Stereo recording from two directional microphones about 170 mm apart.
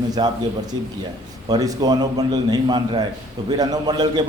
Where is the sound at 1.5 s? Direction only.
20° right (ahead or behind).